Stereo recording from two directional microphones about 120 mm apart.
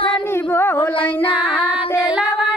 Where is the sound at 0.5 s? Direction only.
20° left (ahead or behind).